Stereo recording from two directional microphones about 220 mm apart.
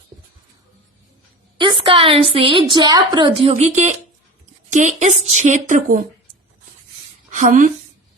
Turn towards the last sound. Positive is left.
turn(degrees=-35)  # may be behind; listen again after turning